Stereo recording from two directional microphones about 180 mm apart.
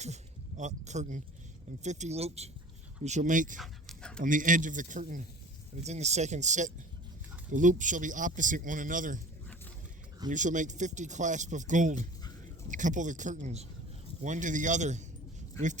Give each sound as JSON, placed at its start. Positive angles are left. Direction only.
{"t": 0.0, "sound": "speech", "side_deg": -40}
{"t": 3.6, "sound": "dog", "side_deg": 5}
{"t": 4.2, "sound": "speech", "side_deg": -45}
{"t": 10.2, "sound": "speech", "side_deg": -45}